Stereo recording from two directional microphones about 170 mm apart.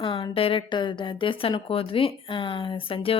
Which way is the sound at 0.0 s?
30° left (ahead or behind).